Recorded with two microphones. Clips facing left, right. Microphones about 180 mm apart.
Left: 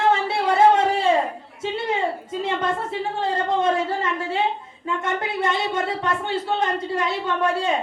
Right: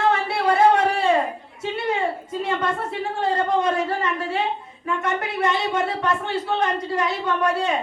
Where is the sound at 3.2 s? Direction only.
25° left (ahead or behind).